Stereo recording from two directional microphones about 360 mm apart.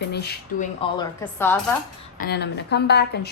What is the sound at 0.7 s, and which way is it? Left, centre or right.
Speech, centre.